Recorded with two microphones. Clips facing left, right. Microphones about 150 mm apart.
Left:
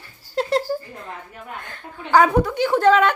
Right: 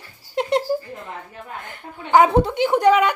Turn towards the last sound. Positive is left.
turn(degrees=-10)  # may be behind; listen again after turning